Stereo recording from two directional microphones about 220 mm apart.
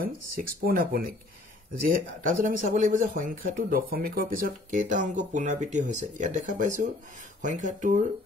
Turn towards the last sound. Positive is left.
turn(degrees=-35)  # may be behind; listen again after turning